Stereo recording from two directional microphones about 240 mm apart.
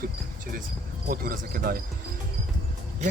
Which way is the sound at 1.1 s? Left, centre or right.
Right.